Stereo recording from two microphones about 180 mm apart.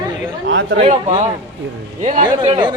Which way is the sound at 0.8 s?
35° right (ahead or behind).